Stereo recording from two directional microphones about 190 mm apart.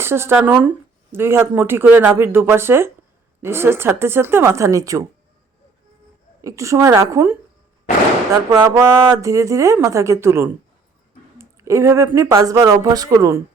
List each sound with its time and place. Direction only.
0.0 s speech: 10° right (ahead or behind)
6.4 s speech: 15° right (ahead or behind)
8.4 s speech: 15° right (ahead or behind)